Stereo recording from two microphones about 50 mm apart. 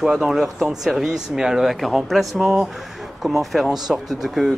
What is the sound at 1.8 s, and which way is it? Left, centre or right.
Speech, centre.